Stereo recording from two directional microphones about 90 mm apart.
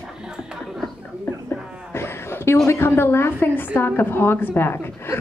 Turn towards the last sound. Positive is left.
turn(degrees=25)  # may be behind; listen again after turning